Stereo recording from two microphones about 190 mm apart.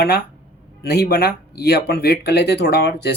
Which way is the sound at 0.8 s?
60° left (ahead or behind).